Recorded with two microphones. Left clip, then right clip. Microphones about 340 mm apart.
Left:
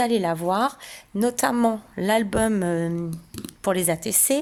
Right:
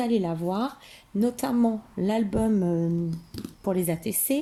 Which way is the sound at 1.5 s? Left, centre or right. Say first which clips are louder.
Left 4 dB; left.